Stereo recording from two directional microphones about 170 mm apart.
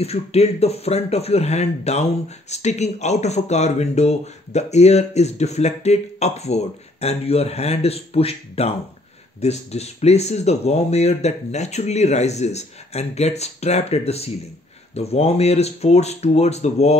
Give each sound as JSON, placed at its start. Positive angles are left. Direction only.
{"t": 0.0, "sound": "a man's voice", "side_deg": 35}